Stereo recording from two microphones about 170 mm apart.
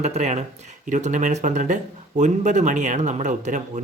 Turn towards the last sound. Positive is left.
turn(degrees=-45)  # may be behind; listen again after turning